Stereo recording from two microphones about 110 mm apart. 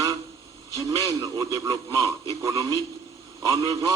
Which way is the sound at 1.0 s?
40° right (ahead or behind).